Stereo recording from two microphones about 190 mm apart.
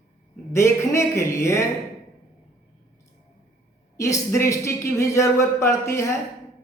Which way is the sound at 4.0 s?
15° left (ahead or behind).